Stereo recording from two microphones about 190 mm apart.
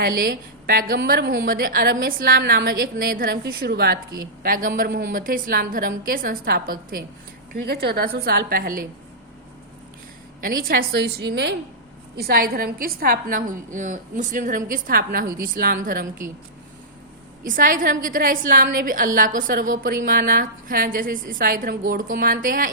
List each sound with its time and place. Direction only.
0.0 s a woman's voice: 50° right (ahead or behind)
10.4 s a woman's voice: 50° right (ahead or behind)
17.4 s a woman's voice: 45° right (ahead or behind)